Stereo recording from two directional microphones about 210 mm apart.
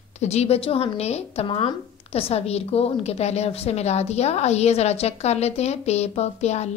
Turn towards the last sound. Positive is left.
turn(degrees=30)  # may be behind; listen again after turning